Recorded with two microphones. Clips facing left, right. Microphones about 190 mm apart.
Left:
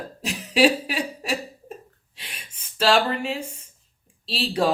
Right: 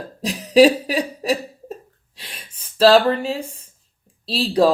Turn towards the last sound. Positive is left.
turn(degrees=-35)  # may be behind; listen again after turning